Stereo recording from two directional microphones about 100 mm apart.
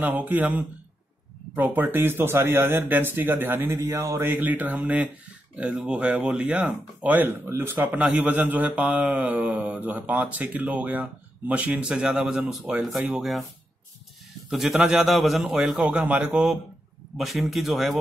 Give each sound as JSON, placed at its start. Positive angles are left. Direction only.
{"t": 0.0, "sound": "speech", "side_deg": -15}
{"t": 4.3, "sound": "a man's voice", "side_deg": -15}
{"t": 14.5, "sound": "a man's voice", "side_deg": 0}